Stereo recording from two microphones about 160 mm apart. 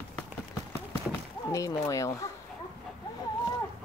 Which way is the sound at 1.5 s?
20° left (ahead or behind).